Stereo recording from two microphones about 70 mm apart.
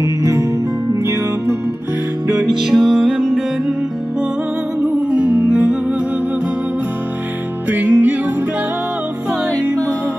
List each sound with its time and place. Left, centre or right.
0.0 s music: right
2.6 s music: centre
4.8 s music: centre
7.7 s music: right